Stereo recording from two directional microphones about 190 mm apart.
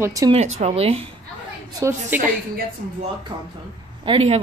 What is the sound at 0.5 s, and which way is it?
Speech, 35° right (ahead or behind).